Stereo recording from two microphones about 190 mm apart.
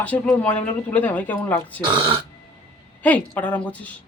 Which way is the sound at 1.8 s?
25° right (ahead or behind).